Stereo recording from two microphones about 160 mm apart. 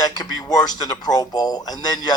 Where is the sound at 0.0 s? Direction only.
25° left (ahead or behind).